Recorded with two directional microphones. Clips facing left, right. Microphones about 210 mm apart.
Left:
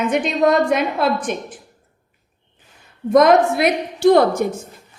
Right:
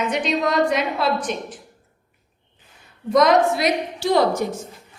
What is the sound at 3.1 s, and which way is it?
A woman's voice, 55° left (ahead or behind).